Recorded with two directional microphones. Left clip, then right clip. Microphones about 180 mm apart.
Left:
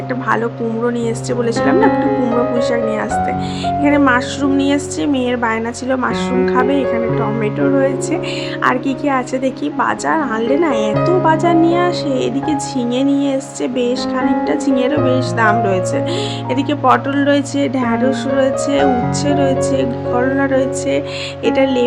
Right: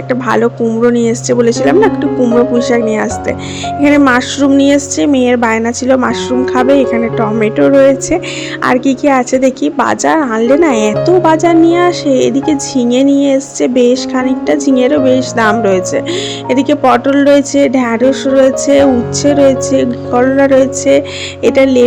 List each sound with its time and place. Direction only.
0.1 s a woman's voice: 40° right (ahead or behind)